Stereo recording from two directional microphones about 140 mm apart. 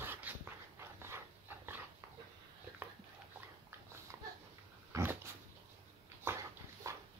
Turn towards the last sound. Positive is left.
turn(degrees=-20)  # may be behind; listen again after turning